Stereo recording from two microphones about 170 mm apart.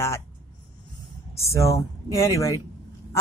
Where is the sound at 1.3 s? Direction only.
15° left (ahead or behind).